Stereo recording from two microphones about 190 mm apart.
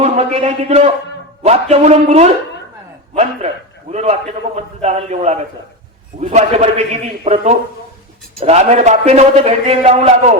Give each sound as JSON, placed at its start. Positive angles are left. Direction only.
{"t": 0.0, "sound": "a man's voice", "side_deg": -35}
{"t": 3.9, "sound": "a man's voice", "side_deg": -35}